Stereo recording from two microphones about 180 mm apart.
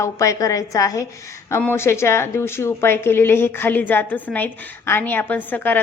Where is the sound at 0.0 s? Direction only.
15° left (ahead or behind).